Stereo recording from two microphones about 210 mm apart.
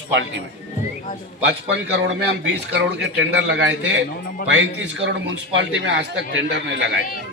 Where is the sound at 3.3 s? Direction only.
55° right (ahead or behind).